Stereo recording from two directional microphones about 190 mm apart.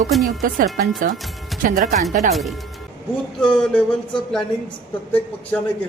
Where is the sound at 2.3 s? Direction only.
Centre (ahead or behind).